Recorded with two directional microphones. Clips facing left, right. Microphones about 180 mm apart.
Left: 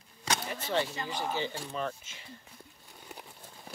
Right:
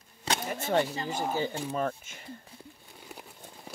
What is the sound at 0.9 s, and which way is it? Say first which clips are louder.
Speech: right 3 dB; 40° right (ahead or behind).